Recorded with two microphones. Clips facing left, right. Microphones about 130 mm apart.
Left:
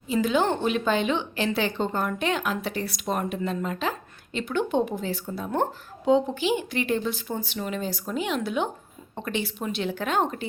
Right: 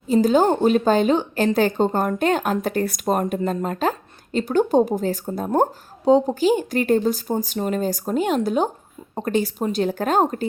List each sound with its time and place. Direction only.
0.1 s speech: 40° right (ahead or behind)